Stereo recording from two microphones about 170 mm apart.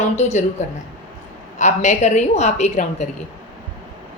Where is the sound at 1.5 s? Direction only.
45° left (ahead or behind).